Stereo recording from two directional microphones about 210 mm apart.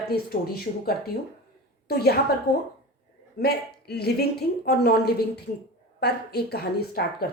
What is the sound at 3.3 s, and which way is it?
A woman's voice, 50° left (ahead or behind).